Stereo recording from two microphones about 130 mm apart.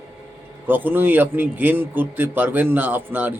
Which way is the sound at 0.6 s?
15° right (ahead or behind).